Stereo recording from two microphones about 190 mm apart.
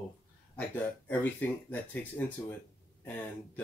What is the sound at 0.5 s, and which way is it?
Speech, 10° left (ahead or behind).